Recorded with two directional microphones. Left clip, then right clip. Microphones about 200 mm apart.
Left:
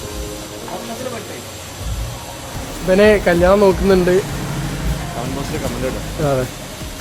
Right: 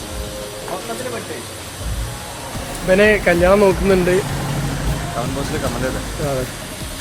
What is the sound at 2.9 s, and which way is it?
Speech, 15° left (ahead or behind).